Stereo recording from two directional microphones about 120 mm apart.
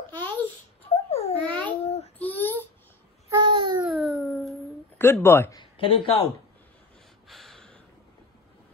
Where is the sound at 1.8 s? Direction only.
60° left (ahead or behind).